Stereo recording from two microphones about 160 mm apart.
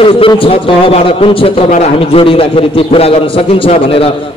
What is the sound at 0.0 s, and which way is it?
A man's voice, 35° left (ahead or behind).